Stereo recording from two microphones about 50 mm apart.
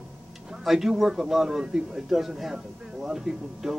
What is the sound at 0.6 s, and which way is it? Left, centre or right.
Speech, centre.